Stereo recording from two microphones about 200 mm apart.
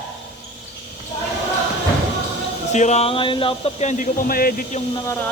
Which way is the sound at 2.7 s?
35° left (ahead or behind).